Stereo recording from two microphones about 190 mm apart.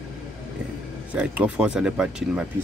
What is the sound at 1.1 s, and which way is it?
A man's voice, 5° right (ahead or behind).